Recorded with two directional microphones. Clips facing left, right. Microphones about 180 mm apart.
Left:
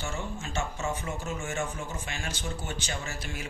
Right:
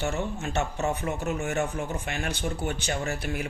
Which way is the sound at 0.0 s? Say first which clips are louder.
Right 6 dB; 60° right (ahead or behind).